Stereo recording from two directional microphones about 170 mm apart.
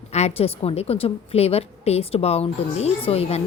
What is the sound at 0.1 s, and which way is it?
A woman's voice, 40° left (ahead or behind).